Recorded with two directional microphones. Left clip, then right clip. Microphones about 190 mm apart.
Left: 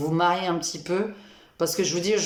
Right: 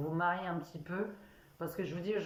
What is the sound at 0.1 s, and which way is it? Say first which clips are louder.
Speech: left 11 dB; 25° left (ahead or behind).